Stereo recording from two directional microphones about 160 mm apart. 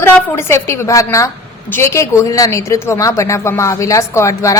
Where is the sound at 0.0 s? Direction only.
15° left (ahead or behind).